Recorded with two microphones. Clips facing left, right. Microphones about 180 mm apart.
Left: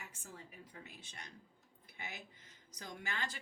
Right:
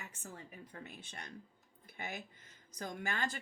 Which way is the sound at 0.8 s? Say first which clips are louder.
Right 5 dB; 55° right (ahead or behind).